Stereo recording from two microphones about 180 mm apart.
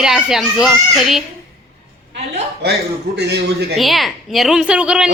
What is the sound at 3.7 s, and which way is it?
A woman's voice, centre (ahead or behind).